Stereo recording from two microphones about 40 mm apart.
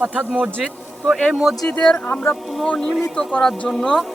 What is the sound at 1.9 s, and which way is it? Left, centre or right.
Speech, left.